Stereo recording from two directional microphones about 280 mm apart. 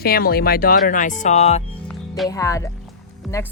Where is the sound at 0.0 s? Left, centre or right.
Left.